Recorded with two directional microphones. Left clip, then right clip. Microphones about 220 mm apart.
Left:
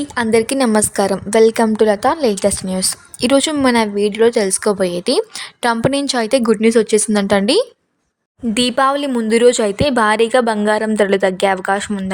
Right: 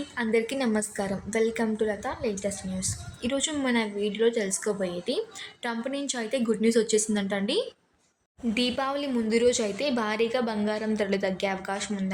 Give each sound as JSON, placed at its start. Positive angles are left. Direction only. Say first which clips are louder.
{"t": 0.2, "sound": "a woman's voice", "louder": "left 12 dB", "side_deg": 45}